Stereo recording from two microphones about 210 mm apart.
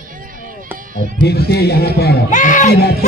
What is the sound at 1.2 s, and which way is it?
A man's voice, 50° left (ahead or behind).